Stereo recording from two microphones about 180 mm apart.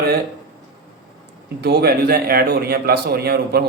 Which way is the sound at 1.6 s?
60° right (ahead or behind).